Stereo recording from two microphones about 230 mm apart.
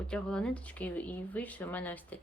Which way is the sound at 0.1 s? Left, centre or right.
Centre.